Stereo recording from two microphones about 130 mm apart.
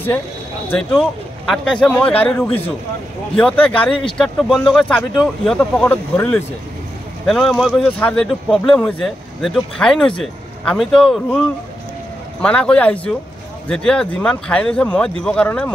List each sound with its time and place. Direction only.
0.7 s speech: centre (ahead or behind)
5.6 s speech: 15° left (ahead or behind)